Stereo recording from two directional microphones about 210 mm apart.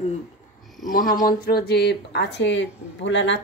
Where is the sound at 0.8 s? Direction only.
40° left (ahead or behind).